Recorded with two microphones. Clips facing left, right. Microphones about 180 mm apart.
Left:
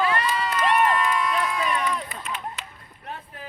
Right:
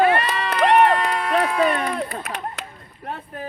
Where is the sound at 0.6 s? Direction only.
65° right (ahead or behind).